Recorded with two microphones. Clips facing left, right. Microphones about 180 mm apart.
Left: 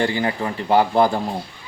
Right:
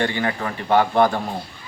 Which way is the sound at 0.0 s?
25° left (ahead or behind).